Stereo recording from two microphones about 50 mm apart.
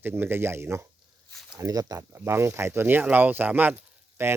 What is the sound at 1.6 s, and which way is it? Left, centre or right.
Speech, right.